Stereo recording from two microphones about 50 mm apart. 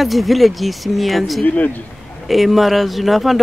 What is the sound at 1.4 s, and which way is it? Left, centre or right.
Speech, left.